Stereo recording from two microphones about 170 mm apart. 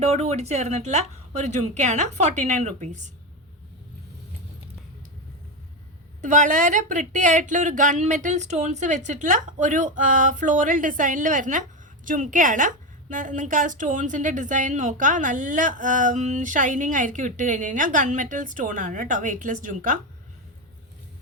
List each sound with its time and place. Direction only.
0.0 s a woman's voice: 40° right (ahead or behind)
6.2 s a woman's voice: 45° right (ahead or behind)